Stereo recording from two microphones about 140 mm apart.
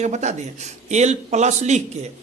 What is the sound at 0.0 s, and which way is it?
Speech, 55° right (ahead or behind).